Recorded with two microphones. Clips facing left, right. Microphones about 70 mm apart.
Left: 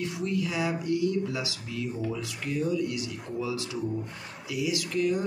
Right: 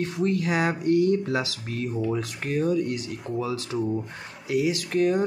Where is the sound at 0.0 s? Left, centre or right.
Right.